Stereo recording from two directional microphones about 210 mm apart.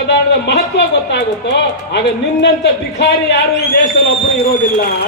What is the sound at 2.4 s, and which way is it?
A man's voice, 55° left (ahead or behind).